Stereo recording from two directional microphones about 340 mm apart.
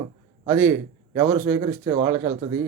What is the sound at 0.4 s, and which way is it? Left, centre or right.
A man's voice, centre.